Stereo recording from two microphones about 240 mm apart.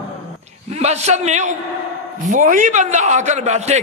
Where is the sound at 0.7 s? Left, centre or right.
Right.